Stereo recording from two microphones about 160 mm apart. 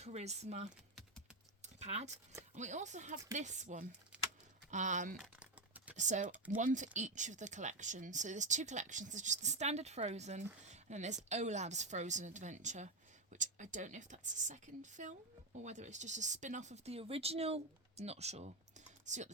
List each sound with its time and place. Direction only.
0.0 s speech: 45° right (ahead or behind)
1.6 s a sound: 45° right (ahead or behind)
2.6 s speech: 45° right (ahead or behind)
4.1 s typing: 10° right (ahead or behind)
4.7 s speech: 50° right (ahead or behind)
5.1 s typing: 5° right (ahead or behind)
6.0 s speech: 50° right (ahead or behind)
10.7 s a sound: 45° right (ahead or behind)
11.3 s speech: 45° right (ahead or behind)